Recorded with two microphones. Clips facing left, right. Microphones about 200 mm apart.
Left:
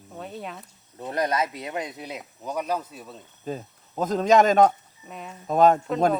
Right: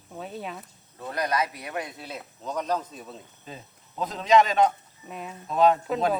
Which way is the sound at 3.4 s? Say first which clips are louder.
Left 14 dB; 45° left (ahead or behind).